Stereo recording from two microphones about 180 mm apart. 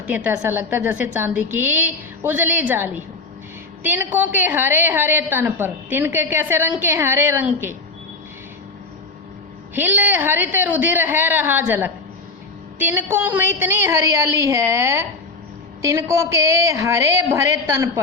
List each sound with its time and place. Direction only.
0.0 s a woman's voice: 10° right (ahead or behind)
9.7 s a woman's voice: 10° right (ahead or behind)